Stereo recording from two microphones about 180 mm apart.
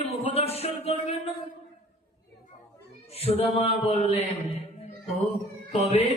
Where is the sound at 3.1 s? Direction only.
35° left (ahead or behind).